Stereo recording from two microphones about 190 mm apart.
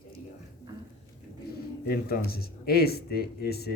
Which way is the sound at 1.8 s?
55° left (ahead or behind).